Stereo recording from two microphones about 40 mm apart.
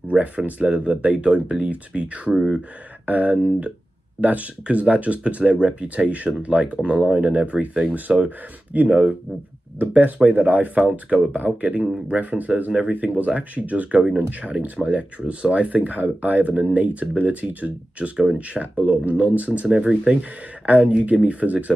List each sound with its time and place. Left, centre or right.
0.1 s speech: right
3.1 s speech: right
8.7 s speech: right
13.0 s speech: right
19.8 s speech: right
20.6 s speech: right